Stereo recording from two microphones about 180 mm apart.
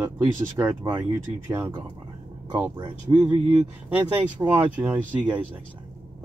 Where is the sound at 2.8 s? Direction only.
25° right (ahead or behind).